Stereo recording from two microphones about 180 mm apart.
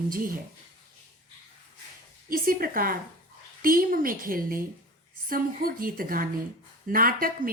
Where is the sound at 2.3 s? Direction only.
50° right (ahead or behind).